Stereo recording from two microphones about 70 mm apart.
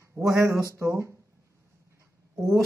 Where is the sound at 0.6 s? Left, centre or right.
Right.